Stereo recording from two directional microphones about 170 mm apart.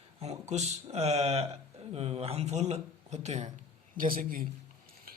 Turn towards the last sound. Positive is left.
turn(degrees=-55)  # may be behind; listen again after turning